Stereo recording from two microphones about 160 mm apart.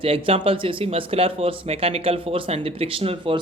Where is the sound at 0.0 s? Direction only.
35° right (ahead or behind).